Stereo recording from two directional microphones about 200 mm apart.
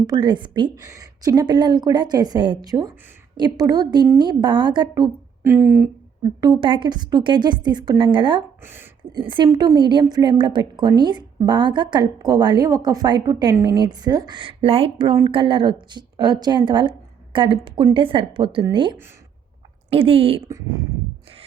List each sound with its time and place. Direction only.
0.1 s a woman's voice: 20° right (ahead or behind)
6.4 s a woman's voice: 20° right (ahead or behind)
8.6 s speech: 10° right (ahead or behind)
9.1 s a woman's voice: 25° right (ahead or behind)
20.5 s speech: 15° right (ahead or behind)